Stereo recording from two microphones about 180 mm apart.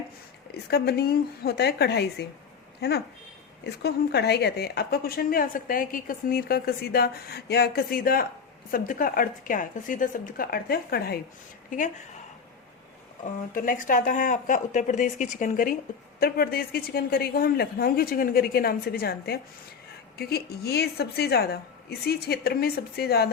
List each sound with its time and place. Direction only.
0.7 s a woman's voice: 60° left (ahead or behind)
3.7 s a woman's voice: 65° left (ahead or behind)
13.2 s a woman's voice: 50° left (ahead or behind)